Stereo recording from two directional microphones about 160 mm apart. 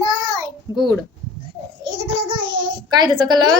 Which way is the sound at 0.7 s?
25° right (ahead or behind).